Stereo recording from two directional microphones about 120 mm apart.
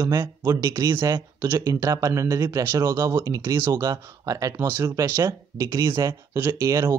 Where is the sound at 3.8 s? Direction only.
30° right (ahead or behind).